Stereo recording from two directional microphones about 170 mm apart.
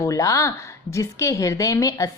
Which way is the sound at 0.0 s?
20° left (ahead or behind).